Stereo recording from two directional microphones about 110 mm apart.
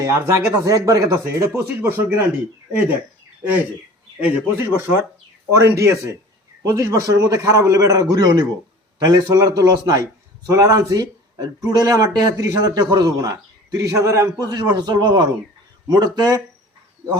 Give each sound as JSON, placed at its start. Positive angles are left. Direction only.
{"t": 0.0, "sound": "a man's voice", "side_deg": -30}
{"t": 4.2, "sound": "a man's voice", "side_deg": -15}
{"t": 14.5, "sound": "a man's voice", "side_deg": -40}